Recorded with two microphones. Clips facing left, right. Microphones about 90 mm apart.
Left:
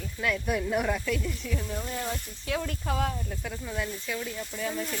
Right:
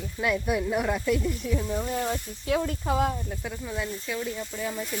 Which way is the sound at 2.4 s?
25° right (ahead or behind).